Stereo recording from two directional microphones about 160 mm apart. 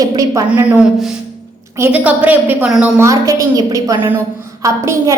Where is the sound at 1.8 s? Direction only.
10° right (ahead or behind).